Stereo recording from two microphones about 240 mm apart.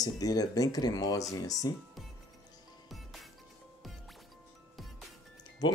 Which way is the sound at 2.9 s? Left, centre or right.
Centre.